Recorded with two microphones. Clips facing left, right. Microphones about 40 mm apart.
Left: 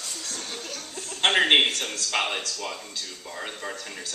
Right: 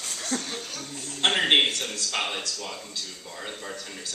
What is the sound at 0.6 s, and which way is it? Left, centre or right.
Chuckle, centre.